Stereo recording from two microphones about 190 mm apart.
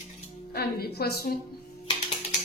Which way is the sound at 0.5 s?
55° left (ahead or behind).